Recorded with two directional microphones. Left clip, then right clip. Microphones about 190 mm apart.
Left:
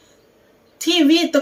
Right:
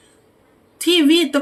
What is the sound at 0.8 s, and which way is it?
Speech, 20° right (ahead or behind).